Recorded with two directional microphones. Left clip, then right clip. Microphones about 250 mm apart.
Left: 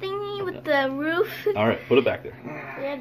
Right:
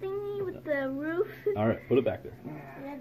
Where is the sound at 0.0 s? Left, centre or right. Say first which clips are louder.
Left 5 dB; left.